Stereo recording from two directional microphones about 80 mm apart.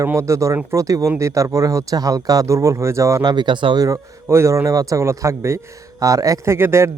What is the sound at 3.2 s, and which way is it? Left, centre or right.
Speech, right.